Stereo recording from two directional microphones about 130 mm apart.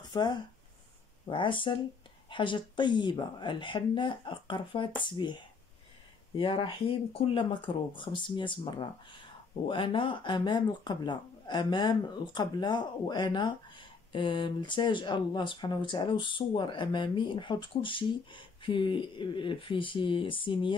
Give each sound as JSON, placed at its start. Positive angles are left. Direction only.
{"t": 0.1, "sound": "speech", "side_deg": 35}